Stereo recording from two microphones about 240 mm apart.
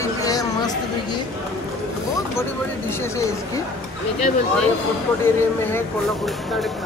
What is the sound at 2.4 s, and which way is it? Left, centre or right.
Speech, centre.